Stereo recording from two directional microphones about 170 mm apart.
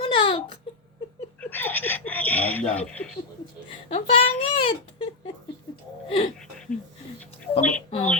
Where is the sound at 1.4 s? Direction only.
10° left (ahead or behind).